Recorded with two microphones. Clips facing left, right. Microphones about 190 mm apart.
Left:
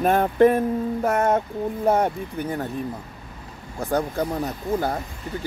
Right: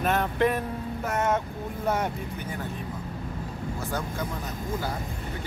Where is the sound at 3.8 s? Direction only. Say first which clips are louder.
Left 10 dB; 35° left (ahead or behind).